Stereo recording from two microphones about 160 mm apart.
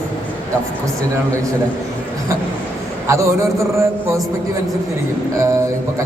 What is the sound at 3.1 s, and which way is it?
A man's voice, 15° right (ahead or behind).